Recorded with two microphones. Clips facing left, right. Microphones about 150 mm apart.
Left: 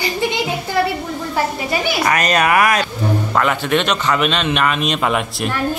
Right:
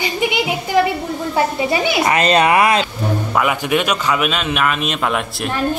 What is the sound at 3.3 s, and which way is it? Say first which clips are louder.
A man's voice: even; 10° right (ahead or behind).